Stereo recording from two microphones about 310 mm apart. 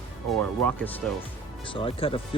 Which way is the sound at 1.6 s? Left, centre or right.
Centre.